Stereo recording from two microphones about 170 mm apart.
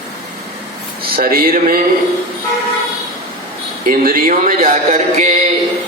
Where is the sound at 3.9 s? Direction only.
55° right (ahead or behind).